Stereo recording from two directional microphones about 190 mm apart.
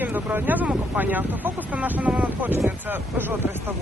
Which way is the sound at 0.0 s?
10° right (ahead or behind).